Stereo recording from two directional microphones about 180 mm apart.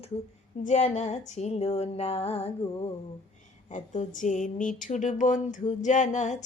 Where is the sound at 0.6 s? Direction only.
45° left (ahead or behind).